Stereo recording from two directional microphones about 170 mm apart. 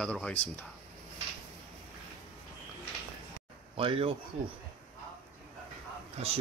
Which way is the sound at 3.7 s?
35° right (ahead or behind).